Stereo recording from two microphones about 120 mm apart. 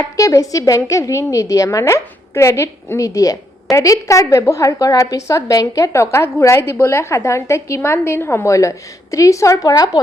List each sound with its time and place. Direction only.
0.0 s a woman's voice: 25° left (ahead or behind)